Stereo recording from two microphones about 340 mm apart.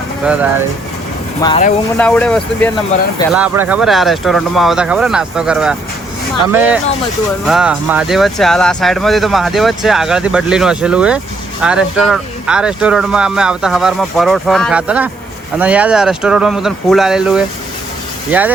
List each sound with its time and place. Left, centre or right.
1.4 s speech: centre
2.0 s speech: centre